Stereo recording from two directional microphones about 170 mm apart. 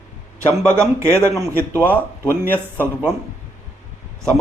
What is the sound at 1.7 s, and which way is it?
Speech, 10° left (ahead or behind).